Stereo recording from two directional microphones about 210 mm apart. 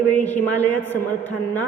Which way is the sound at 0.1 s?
10° left (ahead or behind).